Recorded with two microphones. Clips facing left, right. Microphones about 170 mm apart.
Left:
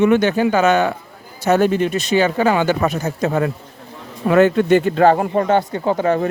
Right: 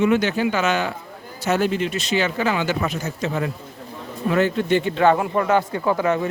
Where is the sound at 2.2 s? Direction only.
45° left (ahead or behind).